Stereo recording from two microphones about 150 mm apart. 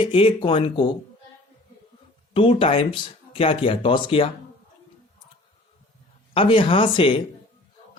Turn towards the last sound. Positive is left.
turn(degrees=35)  # may be behind; listen again after turning